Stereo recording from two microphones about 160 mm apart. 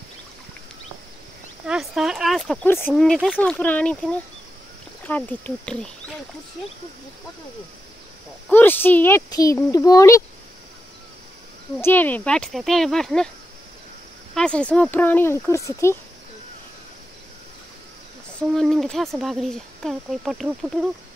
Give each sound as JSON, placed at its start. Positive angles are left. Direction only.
{"t": 1.7, "sound": "a sound", "side_deg": -5}
{"t": 2.6, "sound": "speech", "side_deg": 15}
{"t": 3.0, "sound": "speech", "side_deg": 0}
{"t": 8.5, "sound": "speech", "side_deg": 10}
{"t": 11.8, "sound": "speech", "side_deg": 10}
{"t": 14.3, "sound": "speech", "side_deg": 5}
{"t": 18.5, "sound": "speech", "side_deg": 0}